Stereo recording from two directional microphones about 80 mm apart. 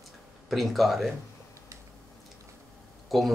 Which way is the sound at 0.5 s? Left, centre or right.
Centre.